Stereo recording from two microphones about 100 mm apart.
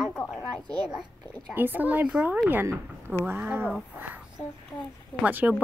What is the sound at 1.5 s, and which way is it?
Speech, 20° right (ahead or behind).